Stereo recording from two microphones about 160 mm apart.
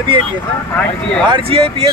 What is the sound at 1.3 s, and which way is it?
Speech, 40° right (ahead or behind).